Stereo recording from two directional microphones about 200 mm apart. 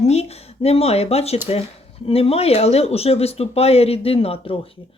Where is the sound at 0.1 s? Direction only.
30° left (ahead or behind).